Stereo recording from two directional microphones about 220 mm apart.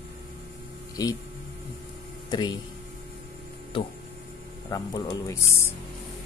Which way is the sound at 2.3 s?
20° left (ahead or behind).